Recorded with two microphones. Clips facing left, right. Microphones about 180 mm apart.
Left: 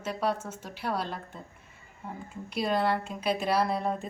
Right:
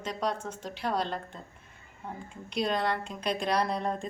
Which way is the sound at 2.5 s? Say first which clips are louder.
Left 2 dB; 5° left (ahead or behind).